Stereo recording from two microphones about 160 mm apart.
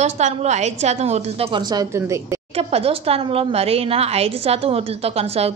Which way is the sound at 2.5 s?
40° right (ahead or behind).